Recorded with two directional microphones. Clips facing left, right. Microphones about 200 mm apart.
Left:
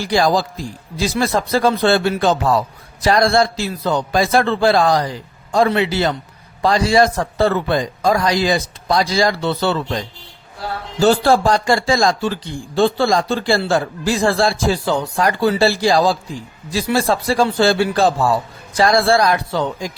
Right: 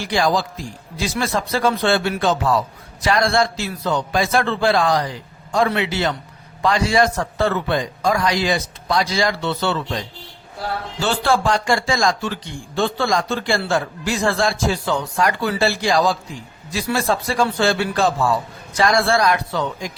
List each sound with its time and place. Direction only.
0.0 s a man's voice: 35° left (ahead or behind)
11.0 s a man's voice: 40° left (ahead or behind)